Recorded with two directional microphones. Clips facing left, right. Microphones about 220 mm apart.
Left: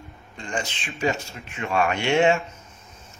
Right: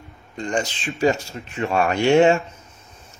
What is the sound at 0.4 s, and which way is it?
Speech, 40° right (ahead or behind).